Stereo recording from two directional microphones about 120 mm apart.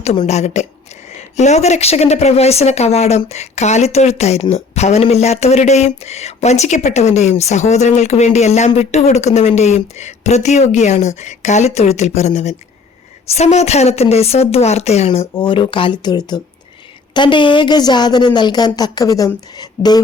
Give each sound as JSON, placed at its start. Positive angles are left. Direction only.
{"t": 0.3, "sound": "a woman's voice", "side_deg": 70}
{"t": 15.4, "sound": "a woman's voice", "side_deg": 45}